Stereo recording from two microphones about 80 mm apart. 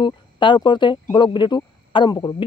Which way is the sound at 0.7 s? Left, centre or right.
Left.